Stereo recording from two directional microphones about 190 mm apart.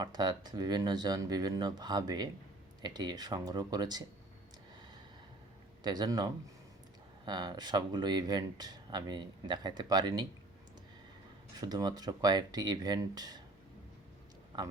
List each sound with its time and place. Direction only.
0.0 s speech: 20° right (ahead or behind)
5.8 s speech: 20° right (ahead or behind)
11.6 s speech: 20° right (ahead or behind)